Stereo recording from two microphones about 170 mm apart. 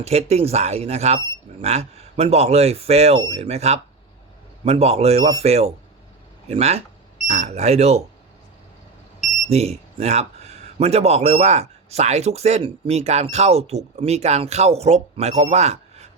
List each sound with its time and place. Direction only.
0.0 s speech: 40° right (ahead or behind)
9.5 s speech: 40° right (ahead or behind)